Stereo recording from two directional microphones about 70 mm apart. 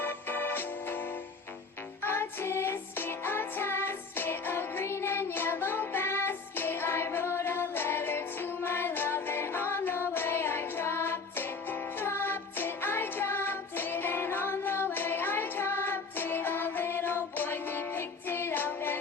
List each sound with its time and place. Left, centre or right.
0.0 s music: left
2.0 s music: left